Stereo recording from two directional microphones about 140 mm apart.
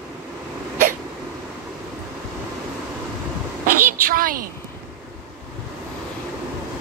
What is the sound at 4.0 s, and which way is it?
Speech, 90° right.